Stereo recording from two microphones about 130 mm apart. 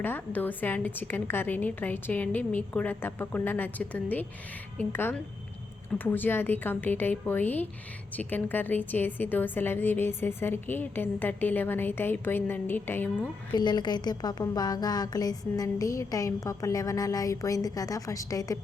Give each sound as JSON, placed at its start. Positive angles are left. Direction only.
{"t": 0.0, "sound": "a woman's voice", "side_deg": 15}
{"t": 13.5, "sound": "a woman's voice", "side_deg": 35}